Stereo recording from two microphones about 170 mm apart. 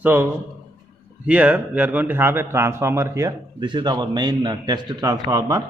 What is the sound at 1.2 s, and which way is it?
A man's voice, 10° right (ahead or behind).